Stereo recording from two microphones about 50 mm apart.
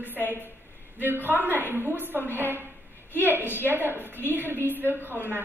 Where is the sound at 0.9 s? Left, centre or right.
Right.